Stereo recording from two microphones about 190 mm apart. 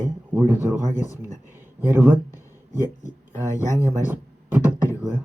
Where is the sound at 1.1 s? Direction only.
20° left (ahead or behind).